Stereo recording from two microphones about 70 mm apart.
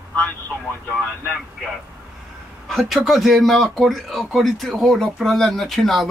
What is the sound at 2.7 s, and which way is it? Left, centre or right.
Speech, centre.